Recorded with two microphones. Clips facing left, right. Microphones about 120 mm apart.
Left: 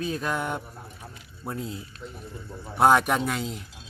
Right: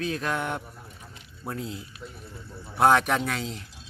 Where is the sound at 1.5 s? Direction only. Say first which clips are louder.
Left 1 dB; 40° left (ahead or behind).